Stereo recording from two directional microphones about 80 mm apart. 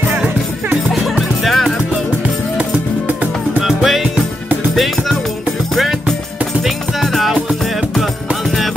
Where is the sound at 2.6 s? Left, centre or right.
Centre.